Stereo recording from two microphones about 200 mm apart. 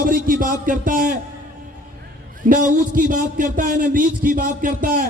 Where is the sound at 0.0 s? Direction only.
45° right (ahead or behind).